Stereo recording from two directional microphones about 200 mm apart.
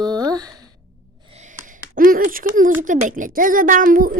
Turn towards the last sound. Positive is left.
turn(degrees=-45)  # may be behind; listen again after turning